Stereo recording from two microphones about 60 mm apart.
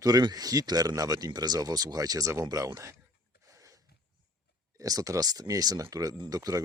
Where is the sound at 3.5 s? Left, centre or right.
Right.